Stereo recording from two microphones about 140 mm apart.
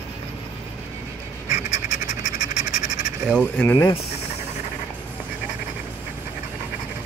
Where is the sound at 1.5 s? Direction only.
55° left (ahead or behind).